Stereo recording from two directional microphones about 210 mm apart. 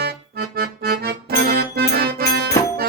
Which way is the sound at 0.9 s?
45° right (ahead or behind).